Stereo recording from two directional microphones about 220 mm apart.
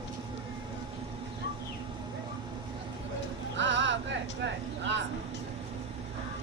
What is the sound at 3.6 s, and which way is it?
Vehicle, 55° right (ahead or behind).